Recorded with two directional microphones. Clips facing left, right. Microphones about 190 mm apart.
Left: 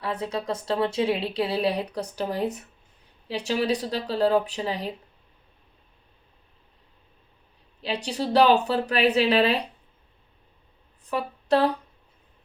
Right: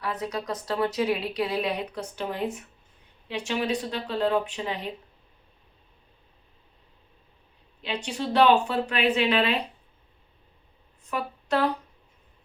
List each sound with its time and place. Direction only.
0.0 s speech: 30° left (ahead or behind)
7.8 s speech: 35° left (ahead or behind)
11.0 s speech: 35° left (ahead or behind)